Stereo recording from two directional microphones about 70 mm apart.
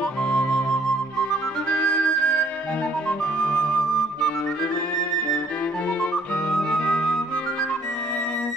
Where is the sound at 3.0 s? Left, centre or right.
Centre.